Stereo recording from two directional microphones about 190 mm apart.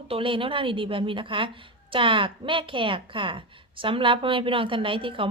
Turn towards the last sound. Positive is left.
turn(degrees=-25)  # may be behind; listen again after turning